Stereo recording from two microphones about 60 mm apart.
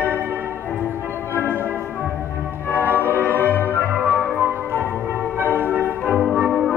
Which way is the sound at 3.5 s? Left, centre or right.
Left.